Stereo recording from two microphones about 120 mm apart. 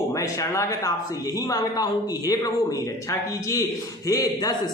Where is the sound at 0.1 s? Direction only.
25° left (ahead or behind).